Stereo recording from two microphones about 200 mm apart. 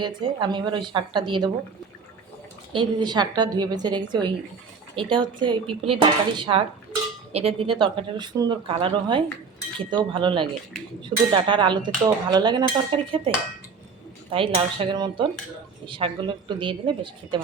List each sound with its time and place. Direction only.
0.0 s dishes: 20° right (ahead or behind)
2.7 s dishes: 20° right (ahead or behind)